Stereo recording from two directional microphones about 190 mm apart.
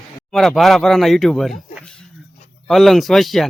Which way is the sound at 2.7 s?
Centre (ahead or behind).